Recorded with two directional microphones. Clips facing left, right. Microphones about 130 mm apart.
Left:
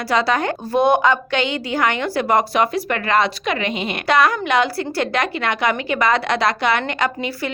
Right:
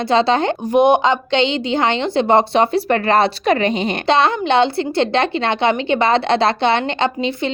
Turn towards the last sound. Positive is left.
turn(degrees=-25)  # may be behind; listen again after turning